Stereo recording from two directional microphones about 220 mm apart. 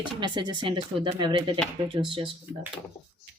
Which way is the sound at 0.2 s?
20° right (ahead or behind).